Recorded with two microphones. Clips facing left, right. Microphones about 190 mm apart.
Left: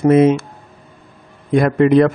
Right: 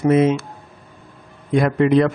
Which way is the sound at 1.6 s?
50° left (ahead or behind).